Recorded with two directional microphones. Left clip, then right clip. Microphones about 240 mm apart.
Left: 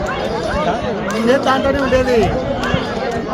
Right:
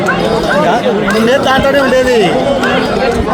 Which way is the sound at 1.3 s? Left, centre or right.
Right.